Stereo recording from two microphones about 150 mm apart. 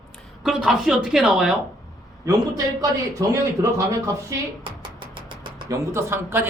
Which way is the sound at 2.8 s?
20° right (ahead or behind).